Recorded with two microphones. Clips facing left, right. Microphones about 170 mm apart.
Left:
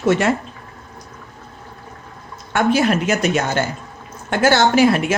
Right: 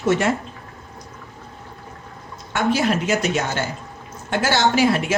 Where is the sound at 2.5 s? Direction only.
55° left (ahead or behind).